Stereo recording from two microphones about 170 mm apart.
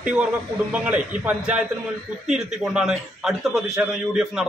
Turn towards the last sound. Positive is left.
turn(degrees=-5)  # may be behind; listen again after turning